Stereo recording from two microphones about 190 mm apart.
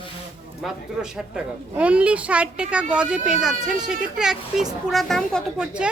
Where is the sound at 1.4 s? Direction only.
5° right (ahead or behind).